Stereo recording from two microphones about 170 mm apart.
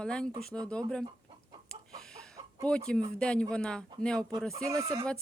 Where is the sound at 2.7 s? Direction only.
5° left (ahead or behind).